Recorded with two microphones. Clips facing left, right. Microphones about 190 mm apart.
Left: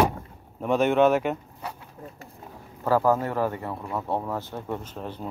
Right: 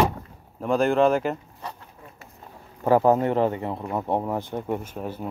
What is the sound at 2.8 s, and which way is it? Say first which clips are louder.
Speech: right 3 dB; 20° right (ahead or behind).